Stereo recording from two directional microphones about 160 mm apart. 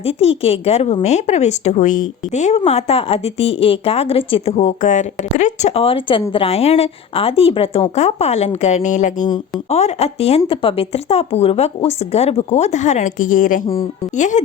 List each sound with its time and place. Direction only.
0.0 s speech: 40° left (ahead or behind)